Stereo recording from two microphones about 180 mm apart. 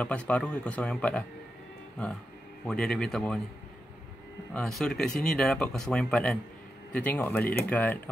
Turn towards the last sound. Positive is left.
turn(degrees=10)  # may be behind; listen again after turning